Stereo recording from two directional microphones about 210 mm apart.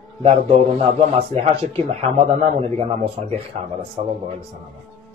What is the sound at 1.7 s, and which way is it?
Speech, 30° right (ahead or behind).